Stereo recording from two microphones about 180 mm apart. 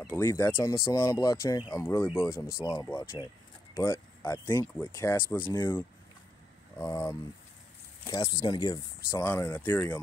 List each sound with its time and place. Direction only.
0.0 s speech: 10° left (ahead or behind)